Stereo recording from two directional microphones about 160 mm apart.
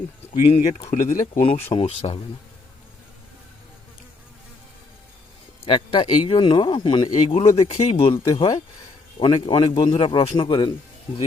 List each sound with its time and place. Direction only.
0.9 s speech: 45° left (ahead or behind)
1.7 s speech: 35° left (ahead or behind)
5.6 s a man's voice: 35° left (ahead or behind)